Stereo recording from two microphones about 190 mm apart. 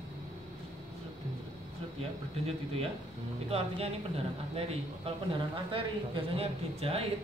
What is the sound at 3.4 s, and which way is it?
Speech, 30° right (ahead or behind).